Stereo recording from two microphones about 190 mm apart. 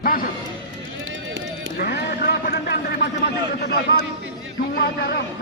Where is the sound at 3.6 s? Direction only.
60° left (ahead or behind).